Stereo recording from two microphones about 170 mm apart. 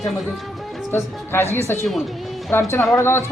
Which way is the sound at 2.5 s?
15° left (ahead or behind).